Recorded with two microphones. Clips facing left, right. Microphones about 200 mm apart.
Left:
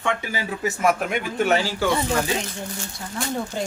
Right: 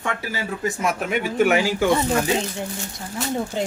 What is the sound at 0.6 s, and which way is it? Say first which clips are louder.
Speech: right 1 dB; 5° left (ahead or behind).